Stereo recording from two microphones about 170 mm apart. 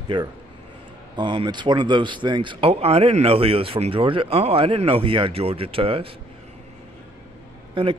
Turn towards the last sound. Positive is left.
turn(degrees=-30)  # may be behind; listen again after turning